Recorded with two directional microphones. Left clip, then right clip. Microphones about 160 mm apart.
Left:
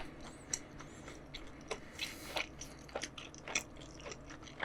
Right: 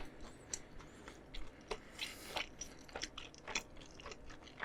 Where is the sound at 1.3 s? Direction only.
25° right (ahead or behind).